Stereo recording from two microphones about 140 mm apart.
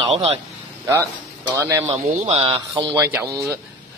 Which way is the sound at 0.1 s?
45° right (ahead or behind).